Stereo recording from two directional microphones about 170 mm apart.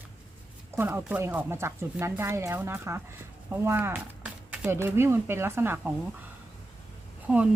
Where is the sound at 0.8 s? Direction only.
10° right (ahead or behind).